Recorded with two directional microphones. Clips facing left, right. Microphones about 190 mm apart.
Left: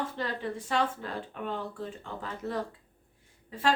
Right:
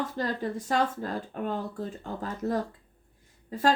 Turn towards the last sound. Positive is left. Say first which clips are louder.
# right 3 dB
turn(degrees=-40)  # may be behind; listen again after turning